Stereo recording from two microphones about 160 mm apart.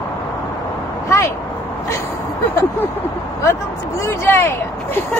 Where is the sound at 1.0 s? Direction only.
15° left (ahead or behind).